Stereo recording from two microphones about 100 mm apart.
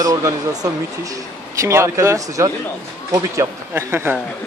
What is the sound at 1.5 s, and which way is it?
Speech, 30° right (ahead or behind).